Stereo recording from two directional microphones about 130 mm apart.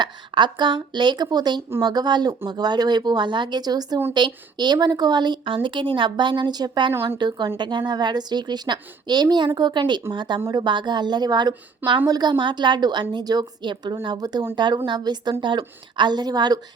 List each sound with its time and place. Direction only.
0.0 s a woman's voice: 35° right (ahead or behind)